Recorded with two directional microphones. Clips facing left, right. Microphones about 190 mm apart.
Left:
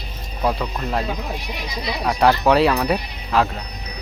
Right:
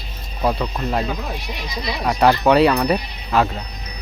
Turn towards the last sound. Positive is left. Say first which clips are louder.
# right 1 dB
turn(degrees=0)  # may be behind; listen again after turning